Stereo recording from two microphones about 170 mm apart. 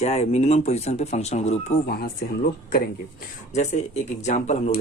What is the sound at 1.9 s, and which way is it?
Speech, 65° left (ahead or behind).